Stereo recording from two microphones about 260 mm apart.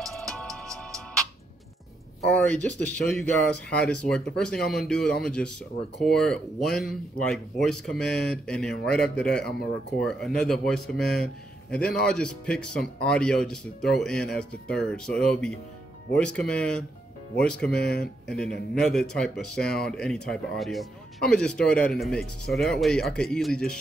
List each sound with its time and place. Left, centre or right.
0.0 s music: centre
2.3 s speech: centre
17.7 s speech: left
18.3 s speech: centre